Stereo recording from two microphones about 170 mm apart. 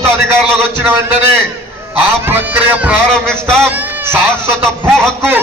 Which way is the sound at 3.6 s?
10° right (ahead or behind).